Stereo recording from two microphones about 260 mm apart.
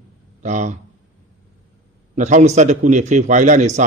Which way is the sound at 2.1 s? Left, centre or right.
Right.